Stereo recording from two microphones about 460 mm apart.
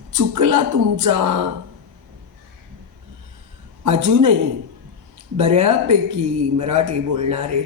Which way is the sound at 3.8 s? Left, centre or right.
Right.